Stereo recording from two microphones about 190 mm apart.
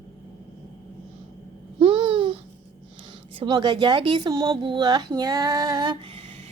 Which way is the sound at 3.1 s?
25° right (ahead or behind).